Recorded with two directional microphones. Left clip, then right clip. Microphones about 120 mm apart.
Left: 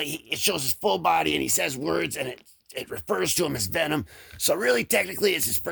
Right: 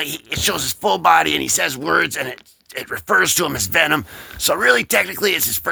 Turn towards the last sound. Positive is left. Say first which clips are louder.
# right 5 dB
turn(degrees=35)  # may be behind; listen again after turning